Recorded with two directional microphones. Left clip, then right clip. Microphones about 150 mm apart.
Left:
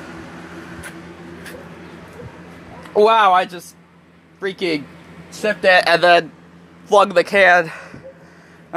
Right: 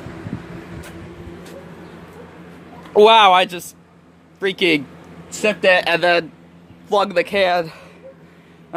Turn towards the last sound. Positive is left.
turn(degrees=0)  # may be behind; listen again after turning